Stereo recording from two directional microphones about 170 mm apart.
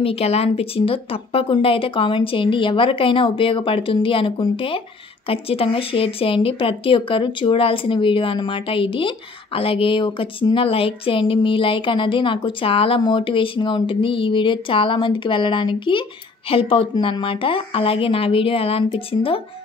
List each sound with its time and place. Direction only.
0.0 s speech: 35° left (ahead or behind)